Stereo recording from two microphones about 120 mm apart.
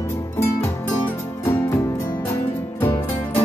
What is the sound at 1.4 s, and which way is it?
Music, 20° left (ahead or behind).